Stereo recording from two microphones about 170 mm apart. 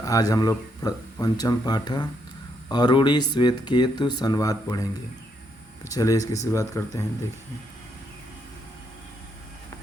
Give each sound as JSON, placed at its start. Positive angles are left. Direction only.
{"t": 0.0, "sound": "speech", "side_deg": 20}